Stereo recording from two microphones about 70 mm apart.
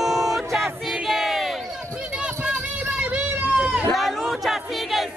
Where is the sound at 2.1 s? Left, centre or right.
Centre.